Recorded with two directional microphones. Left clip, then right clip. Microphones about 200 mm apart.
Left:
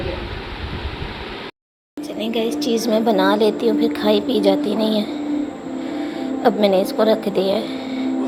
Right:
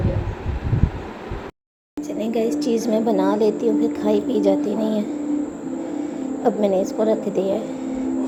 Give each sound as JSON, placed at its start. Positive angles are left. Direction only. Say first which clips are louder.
{"t": 2.1, "sound": "a woman's voice", "louder": "even", "side_deg": -15}
{"t": 6.4, "sound": "a woman's voice", "louder": "left 3 dB", "side_deg": -5}